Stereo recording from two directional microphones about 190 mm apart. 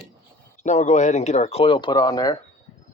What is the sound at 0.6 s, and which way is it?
Speech, 40° left (ahead or behind).